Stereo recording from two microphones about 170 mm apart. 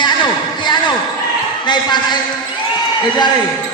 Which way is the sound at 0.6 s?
25° left (ahead or behind).